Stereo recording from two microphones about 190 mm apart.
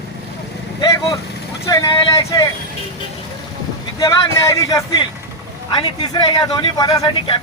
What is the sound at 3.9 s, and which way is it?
Speech, 15° left (ahead or behind).